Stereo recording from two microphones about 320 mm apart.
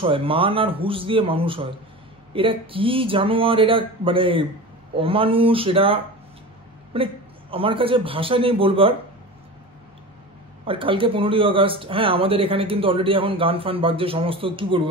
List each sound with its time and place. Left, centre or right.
0.0 s speech: centre
10.6 s speech: centre